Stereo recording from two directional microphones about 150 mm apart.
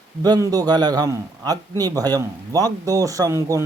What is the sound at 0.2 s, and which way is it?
A man's voice, 25° right (ahead or behind).